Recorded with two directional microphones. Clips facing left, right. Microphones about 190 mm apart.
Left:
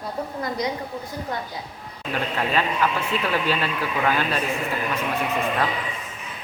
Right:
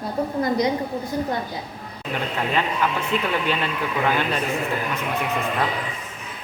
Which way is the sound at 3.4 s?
20° right (ahead or behind).